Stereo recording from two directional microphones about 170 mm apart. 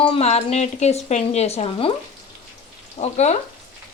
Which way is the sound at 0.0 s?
35° left (ahead or behind).